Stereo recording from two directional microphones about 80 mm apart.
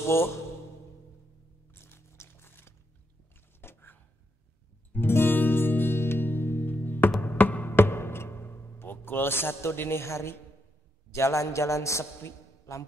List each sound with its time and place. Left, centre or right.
0.1 s a man's voice: left
1.7 s a sound: left
4.9 s music: left
11.1 s a man's voice: left